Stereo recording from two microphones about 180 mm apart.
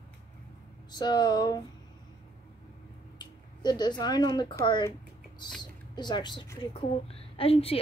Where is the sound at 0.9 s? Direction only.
25° left (ahead or behind).